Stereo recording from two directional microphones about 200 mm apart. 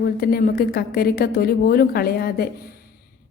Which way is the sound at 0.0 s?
50° left (ahead or behind).